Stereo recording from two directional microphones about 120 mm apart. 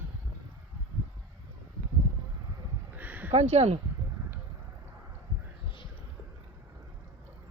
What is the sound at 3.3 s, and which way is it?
Speech, 60° right (ahead or behind).